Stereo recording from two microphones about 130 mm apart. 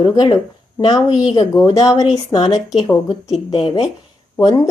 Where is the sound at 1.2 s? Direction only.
40° left (ahead or behind).